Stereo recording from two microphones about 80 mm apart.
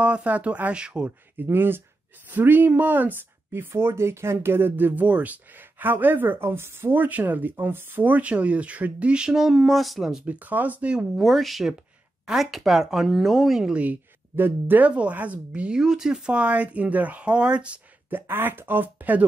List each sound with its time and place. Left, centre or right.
0.0 s speech: centre
1.4 s speech: right; by 10.2 s centre
10.2 s speech: right
11.1 s speech: centre
13.8 s speech: right
18.1 s speech: right